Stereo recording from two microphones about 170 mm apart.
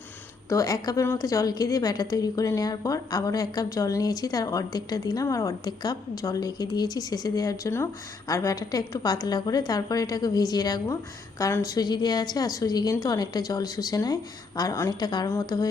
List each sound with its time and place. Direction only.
0.5 s a woman's voice: 20° left (ahead or behind)